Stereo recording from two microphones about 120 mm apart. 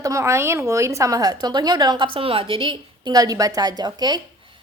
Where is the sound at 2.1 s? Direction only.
50° right (ahead or behind).